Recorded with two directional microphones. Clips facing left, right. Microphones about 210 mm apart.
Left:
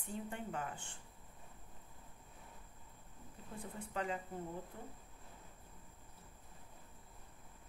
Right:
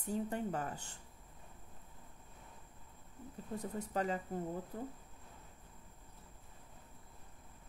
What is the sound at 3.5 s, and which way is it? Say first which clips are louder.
Speech: right 5 dB; 40° right (ahead or behind).